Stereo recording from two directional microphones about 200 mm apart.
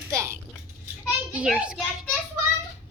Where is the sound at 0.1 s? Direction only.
15° right (ahead or behind).